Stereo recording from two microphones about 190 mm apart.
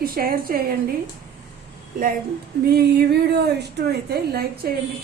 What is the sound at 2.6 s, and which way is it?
A woman's voice, 60° right (ahead or behind).